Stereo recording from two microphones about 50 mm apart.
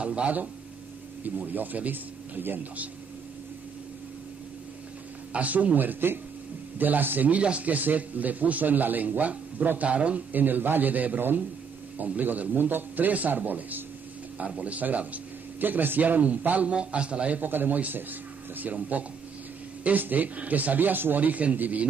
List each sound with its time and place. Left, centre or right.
0.0 s a man's voice: right
5.3 s a man's voice: right
14.4 s a man's voice: right
15.6 s a man's voice: right
17.4 s a man's voice: right